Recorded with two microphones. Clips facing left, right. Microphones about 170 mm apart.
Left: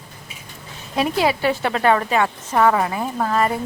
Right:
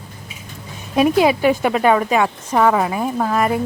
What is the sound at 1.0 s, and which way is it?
A woman's voice, 15° right (ahead or behind).